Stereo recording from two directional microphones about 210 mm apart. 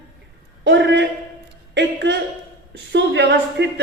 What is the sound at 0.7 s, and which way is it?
A man's voice, 55° right (ahead or behind).